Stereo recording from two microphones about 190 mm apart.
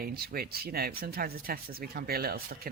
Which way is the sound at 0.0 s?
55° right (ahead or behind).